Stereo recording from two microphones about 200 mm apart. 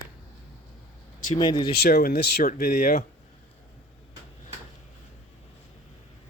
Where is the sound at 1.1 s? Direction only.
40° left (ahead or behind).